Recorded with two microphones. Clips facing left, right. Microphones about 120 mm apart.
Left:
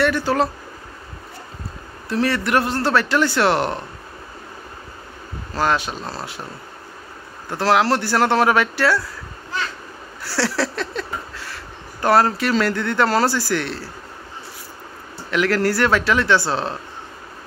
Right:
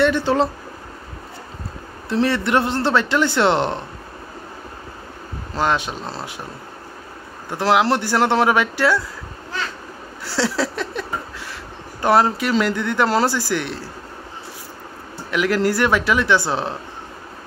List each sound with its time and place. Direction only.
0.0 s speech: 25° right (ahead or behind)
2.0 s speech: 20° right (ahead or behind)
5.5 s speech: 20° right (ahead or behind)
7.4 s speech: 15° right (ahead or behind)
10.2 s a sound: 20° right (ahead or behind)
12.0 s speech: 20° right (ahead or behind)
15.3 s speech: 15° right (ahead or behind)